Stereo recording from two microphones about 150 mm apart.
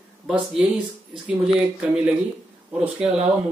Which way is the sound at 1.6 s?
5° right (ahead or behind).